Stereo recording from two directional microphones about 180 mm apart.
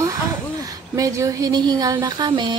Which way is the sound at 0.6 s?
20° right (ahead or behind).